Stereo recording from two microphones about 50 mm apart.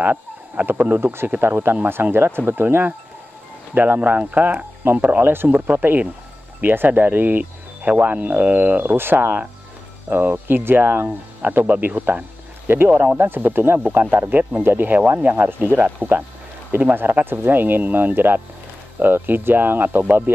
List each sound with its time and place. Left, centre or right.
0.0 s a sound: right
0.7 s speech: right
1.0 s speech: right
5.2 s speech: right
5.5 s speech: right
8.9 s speech: right
15.0 s speech: right